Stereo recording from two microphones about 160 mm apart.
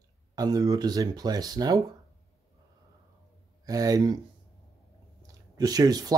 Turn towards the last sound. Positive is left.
turn(degrees=-25)  # may be behind; listen again after turning